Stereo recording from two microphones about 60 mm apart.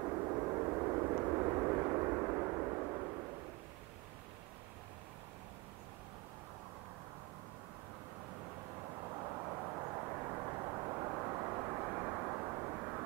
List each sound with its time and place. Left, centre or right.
0.0 s vehicle: right
9.0 s vehicle: right
9.8 s vehicle: right